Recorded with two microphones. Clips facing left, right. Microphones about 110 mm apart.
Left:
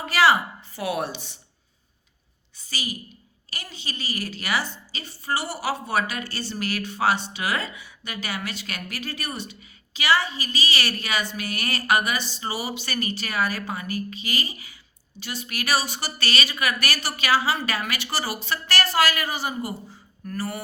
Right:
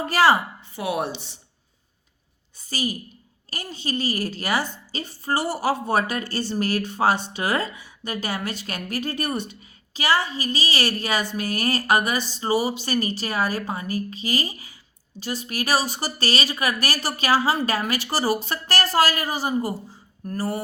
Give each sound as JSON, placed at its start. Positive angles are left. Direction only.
{"t": 0.0, "sound": "a woman's voice", "side_deg": -40}
{"t": 0.6, "sound": "speech", "side_deg": -20}
{"t": 2.6, "sound": "a woman's voice", "side_deg": -40}